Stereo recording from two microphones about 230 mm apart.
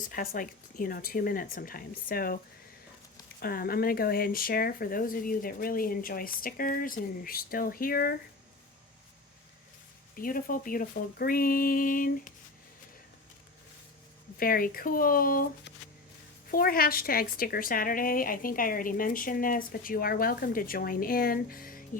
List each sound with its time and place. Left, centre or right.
0.1 s a woman's voice: left
3.4 s a woman's voice: left
10.2 s a woman's voice: left
14.3 s a woman's voice: left